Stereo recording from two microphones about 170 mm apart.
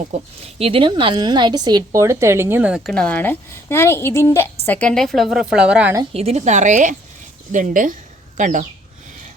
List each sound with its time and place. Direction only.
0.1 s a woman's voice: 40° right (ahead or behind)
0.6 s a woman's voice: 30° right (ahead or behind); by 6.0 s 10° right (ahead or behind)
6.1 s a woman's voice: 40° right (ahead or behind)